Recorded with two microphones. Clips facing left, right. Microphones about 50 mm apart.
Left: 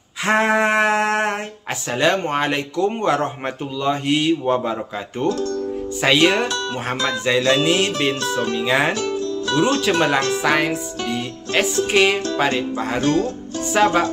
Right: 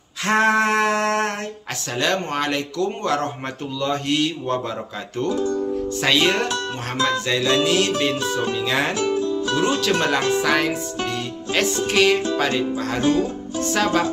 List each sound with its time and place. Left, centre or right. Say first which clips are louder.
0.2 s a sound: left 1 dB; centre
2.0 s speech: left 3 dB; left
5.3 s speech: right 1 dB; centre
5.9 s speech: left 4 dB; centre
8.4 s speech: left 1 dB; centre
8.6 s speech: left 5 dB; centre
8.9 s music: right 2 dB; centre
9.8 s speech: left 2 dB; centre
11.1 s music: left 1 dB; centre
11.9 s speech: right 1 dB; centre
13.0 s speech: even; centre
13.6 s speech: left 3 dB; centre